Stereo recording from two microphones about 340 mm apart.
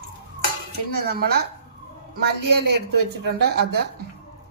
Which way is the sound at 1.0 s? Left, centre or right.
Right.